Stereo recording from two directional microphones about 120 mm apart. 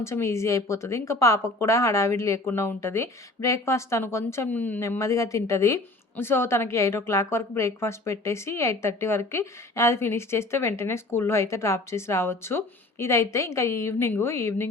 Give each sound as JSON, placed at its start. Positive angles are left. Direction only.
{"t": 0.0, "sound": "speech", "side_deg": 25}
{"t": 4.8, "sound": "speech", "side_deg": 25}